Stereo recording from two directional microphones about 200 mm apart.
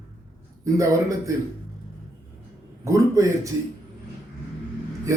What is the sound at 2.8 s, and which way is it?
Speech, 15° right (ahead or behind).